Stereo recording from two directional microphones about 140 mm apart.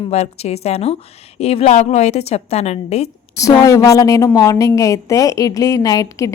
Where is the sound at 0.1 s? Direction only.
50° left (ahead or behind).